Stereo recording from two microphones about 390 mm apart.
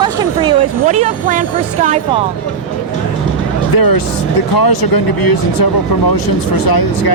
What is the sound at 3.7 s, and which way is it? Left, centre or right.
Speech, left.